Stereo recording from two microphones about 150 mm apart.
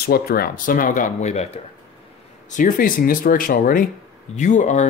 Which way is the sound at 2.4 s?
60° left (ahead or behind).